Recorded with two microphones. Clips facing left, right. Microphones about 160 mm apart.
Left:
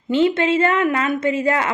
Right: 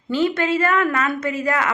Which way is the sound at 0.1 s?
25° left (ahead or behind).